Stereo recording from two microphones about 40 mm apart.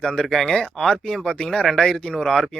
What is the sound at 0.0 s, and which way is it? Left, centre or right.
Speech, left.